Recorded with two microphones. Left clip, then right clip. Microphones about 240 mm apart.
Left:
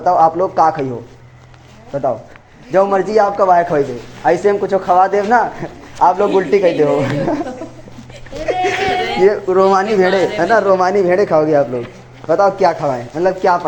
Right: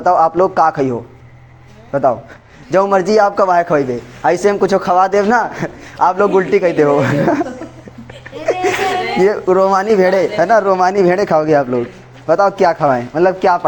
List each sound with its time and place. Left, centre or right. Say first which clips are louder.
0.0 s a man's voice: right 1 dB; right
1.9 s a man's voice: right 4 dB; right
8.4 s a sound: right 1 dB; right
9.2 s a man's voice: even; right